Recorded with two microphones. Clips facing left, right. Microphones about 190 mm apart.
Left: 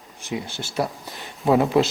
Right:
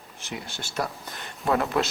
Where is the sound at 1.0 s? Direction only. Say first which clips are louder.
Left 6 dB; centre (ahead or behind).